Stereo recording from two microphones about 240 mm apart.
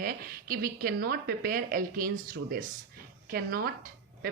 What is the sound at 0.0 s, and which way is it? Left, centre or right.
A woman's voice, right.